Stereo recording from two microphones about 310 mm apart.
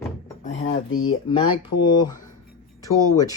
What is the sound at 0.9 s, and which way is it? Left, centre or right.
Speech, left.